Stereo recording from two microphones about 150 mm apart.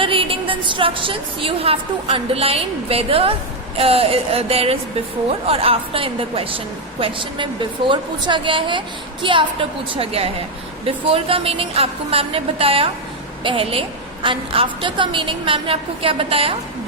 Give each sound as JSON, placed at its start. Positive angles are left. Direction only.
{"t": 0.0, "sound": "a woman's voice", "side_deg": -35}